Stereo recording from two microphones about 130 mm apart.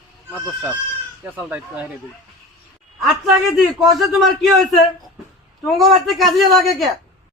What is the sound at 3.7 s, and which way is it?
Speech, centre (ahead or behind).